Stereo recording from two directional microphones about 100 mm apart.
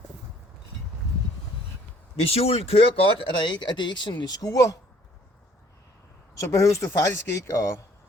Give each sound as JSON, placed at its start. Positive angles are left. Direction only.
{"t": 2.2, "sound": "speech", "side_deg": 80}
{"t": 6.4, "sound": "speech", "side_deg": 30}